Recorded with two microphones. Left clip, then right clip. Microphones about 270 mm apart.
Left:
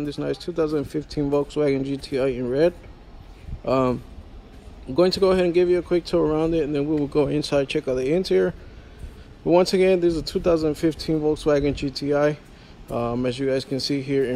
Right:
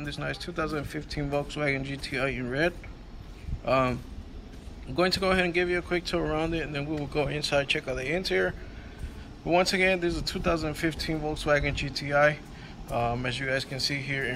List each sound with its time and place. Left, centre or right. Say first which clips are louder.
0.0 s a man's voice: left 7 dB; centre
4.9 s a man's voice: left 6 dB; centre
6.1 s speech: left 9 dB; right
6.5 s a man's voice: left 9 dB; centre
6.9 s speech: left 6 dB; right
7.2 s speech: left 4 dB; centre
9.7 s a man's voice: left 6 dB; centre